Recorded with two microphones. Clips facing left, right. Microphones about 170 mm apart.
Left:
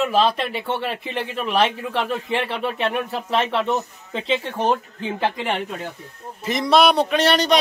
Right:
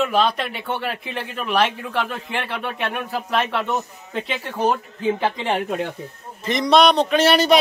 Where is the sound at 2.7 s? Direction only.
30° left (ahead or behind).